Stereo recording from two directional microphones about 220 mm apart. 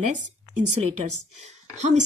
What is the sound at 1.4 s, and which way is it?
Speech, 30° right (ahead or behind).